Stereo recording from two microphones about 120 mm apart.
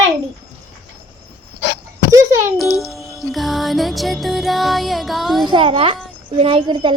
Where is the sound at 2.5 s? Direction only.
Centre (ahead or behind).